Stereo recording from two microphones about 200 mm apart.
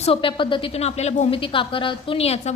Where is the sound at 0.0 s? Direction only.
25° left (ahead or behind).